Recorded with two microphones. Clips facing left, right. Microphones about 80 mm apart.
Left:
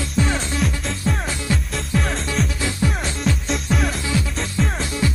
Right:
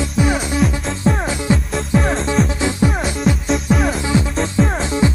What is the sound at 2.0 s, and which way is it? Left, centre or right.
Music, centre.